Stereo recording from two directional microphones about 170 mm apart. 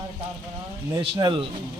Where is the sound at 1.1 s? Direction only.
30° right (ahead or behind).